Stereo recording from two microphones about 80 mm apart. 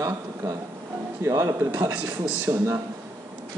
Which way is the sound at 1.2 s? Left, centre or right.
Right.